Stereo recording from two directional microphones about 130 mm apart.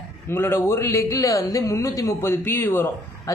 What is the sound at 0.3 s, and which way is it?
A man's voice, 20° left (ahead or behind).